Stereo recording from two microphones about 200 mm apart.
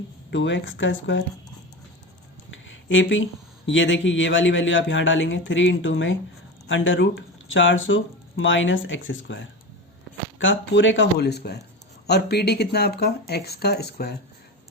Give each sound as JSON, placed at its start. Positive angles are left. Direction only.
{"t": 0.3, "sound": "speech", "side_deg": 65}
{"t": 2.5, "sound": "a sound", "side_deg": 70}
{"t": 3.7, "sound": "speech", "side_deg": 70}